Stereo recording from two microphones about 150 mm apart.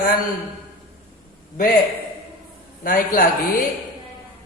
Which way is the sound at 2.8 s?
70° left (ahead or behind).